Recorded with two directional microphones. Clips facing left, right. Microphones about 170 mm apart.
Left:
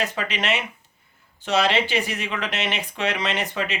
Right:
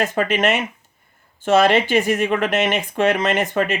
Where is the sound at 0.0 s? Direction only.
50° right (ahead or behind).